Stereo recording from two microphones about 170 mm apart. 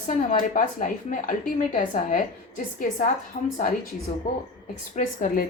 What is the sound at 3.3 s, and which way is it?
Speech, 45° left (ahead or behind).